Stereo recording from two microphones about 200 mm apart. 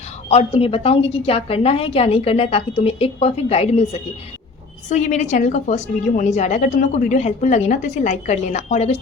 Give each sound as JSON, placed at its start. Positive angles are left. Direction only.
{"t": 0.3, "sound": "a woman's voice", "side_deg": 30}